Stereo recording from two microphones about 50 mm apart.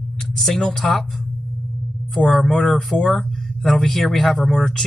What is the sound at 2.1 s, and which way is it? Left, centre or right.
Speech, centre.